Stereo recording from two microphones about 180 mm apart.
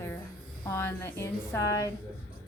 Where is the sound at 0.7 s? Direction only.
15° left (ahead or behind).